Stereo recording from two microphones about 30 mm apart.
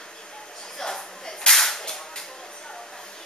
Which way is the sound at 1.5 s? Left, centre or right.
Centre.